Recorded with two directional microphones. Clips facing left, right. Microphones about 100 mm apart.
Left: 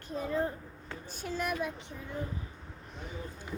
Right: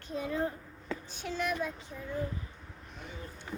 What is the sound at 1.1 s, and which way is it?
Speech, 45° left (ahead or behind).